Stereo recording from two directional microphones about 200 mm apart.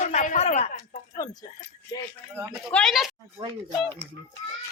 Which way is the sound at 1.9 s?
20° left (ahead or behind).